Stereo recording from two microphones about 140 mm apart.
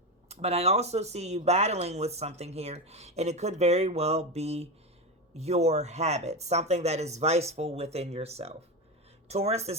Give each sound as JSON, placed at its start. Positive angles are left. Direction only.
{"t": 0.3, "sound": "speech", "side_deg": -50}